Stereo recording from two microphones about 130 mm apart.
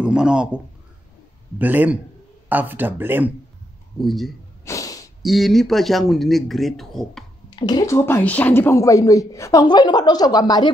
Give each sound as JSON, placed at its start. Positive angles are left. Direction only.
{"t": 0.0, "sound": "a man's voice", "side_deg": -5}
{"t": 1.6, "sound": "speech", "side_deg": -15}
{"t": 4.0, "sound": "a man's voice", "side_deg": 0}
{"t": 4.6, "sound": "snort", "side_deg": 25}
{"t": 5.2, "sound": "a man's voice", "side_deg": 0}
{"t": 7.5, "sound": "speech", "side_deg": 30}